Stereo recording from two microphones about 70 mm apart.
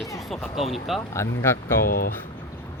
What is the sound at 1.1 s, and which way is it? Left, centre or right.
Speech, left.